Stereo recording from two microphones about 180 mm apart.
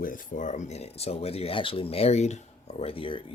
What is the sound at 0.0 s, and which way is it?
Speech, 50° left (ahead or behind).